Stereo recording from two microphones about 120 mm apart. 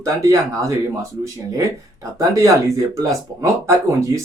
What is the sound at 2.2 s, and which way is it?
Speech, 25° right (ahead or behind).